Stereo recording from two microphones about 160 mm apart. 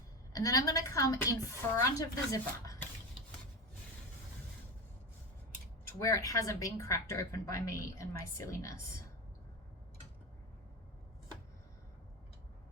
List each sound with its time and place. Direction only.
0.3 s speech: 20° left (ahead or behind)
6.0 s speech: 20° left (ahead or behind)